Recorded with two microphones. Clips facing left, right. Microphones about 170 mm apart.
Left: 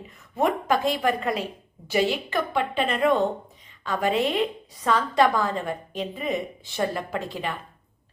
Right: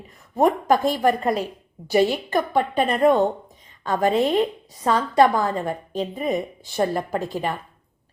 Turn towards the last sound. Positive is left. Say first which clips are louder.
# right 4 dB
turn(degrees=-40)  # may be behind; listen again after turning